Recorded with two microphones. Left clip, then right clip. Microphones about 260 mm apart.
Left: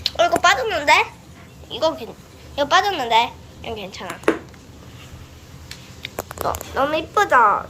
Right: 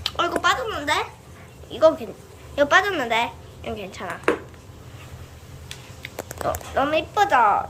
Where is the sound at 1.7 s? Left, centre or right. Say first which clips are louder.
Right 4 dB; centre.